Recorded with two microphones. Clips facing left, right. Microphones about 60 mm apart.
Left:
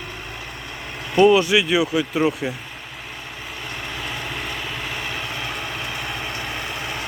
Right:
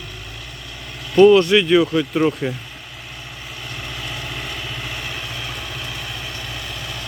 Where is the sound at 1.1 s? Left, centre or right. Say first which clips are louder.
Right 4 dB; centre.